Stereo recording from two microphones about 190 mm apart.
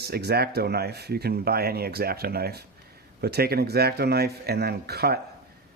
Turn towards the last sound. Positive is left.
turn(degrees=-55)  # may be behind; listen again after turning